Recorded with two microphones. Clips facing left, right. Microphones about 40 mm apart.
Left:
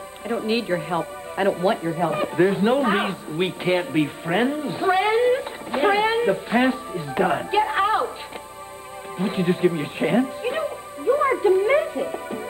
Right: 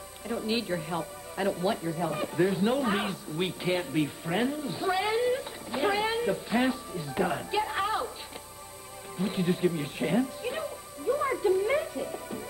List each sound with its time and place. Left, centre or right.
0.3 s speech: left
9.2 s music: left